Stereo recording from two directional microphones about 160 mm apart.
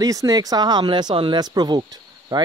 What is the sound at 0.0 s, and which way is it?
Speech, 20° right (ahead or behind).